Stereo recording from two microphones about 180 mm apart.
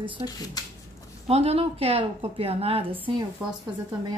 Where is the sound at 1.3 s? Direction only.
35° right (ahead or behind).